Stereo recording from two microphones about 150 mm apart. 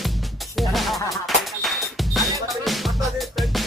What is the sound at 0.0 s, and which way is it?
Music, centre (ahead or behind).